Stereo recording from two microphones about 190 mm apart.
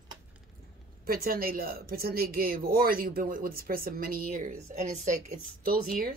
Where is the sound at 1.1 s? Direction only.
50° right (ahead or behind).